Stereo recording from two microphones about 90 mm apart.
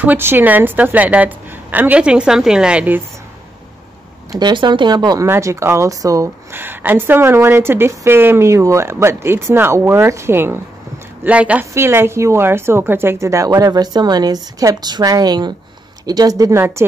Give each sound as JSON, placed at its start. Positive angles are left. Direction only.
{"t": 0.0, "sound": "a woman's voice", "side_deg": -20}
{"t": 4.3, "sound": "a woman's voice", "side_deg": -55}
{"t": 5.2, "sound": "speech", "side_deg": -35}
{"t": 6.5, "sound": "speech", "side_deg": -25}
{"t": 11.2, "sound": "a woman's voice", "side_deg": -15}
{"t": 11.7, "sound": "speech", "side_deg": -30}
{"t": 13.5, "sound": "a woman's voice", "side_deg": -45}
{"t": 16.5, "sound": "speech", "side_deg": -30}